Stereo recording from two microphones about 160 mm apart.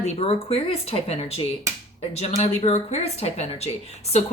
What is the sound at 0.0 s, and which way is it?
A woman's voice, 40° left (ahead or behind).